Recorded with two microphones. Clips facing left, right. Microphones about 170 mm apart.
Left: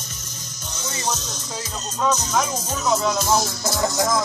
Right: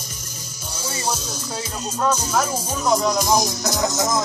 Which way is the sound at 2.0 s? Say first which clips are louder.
Right 1 dB; 10° right (ahead or behind).